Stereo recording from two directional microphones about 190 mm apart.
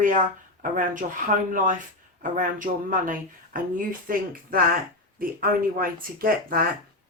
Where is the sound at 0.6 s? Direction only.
45° right (ahead or behind).